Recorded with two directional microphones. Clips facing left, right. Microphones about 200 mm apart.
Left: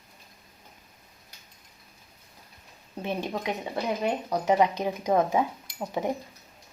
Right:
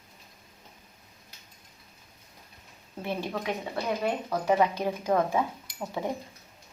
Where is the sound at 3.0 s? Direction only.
20° left (ahead or behind).